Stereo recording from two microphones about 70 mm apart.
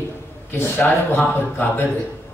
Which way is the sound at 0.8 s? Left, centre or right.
Left.